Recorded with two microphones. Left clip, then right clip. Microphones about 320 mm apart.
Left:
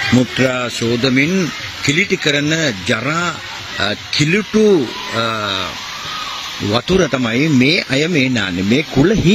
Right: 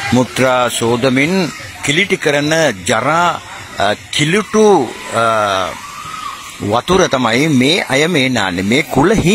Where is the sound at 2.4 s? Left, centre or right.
Right.